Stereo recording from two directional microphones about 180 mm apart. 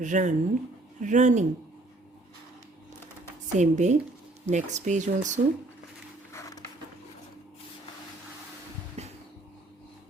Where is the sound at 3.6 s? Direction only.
40° right (ahead or behind).